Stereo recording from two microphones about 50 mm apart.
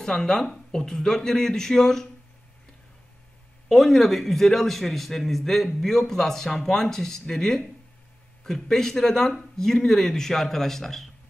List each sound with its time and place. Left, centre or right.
0.0 s a man's voice: centre
3.6 s a man's voice: centre